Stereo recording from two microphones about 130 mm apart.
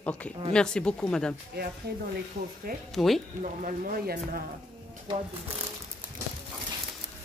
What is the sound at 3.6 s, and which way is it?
Speech, 90° right.